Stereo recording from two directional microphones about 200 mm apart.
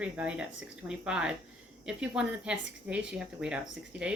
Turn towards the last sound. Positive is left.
turn(degrees=-10)  # may be behind; listen again after turning